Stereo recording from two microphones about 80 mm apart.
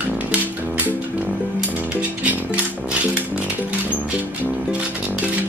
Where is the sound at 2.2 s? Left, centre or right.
Centre.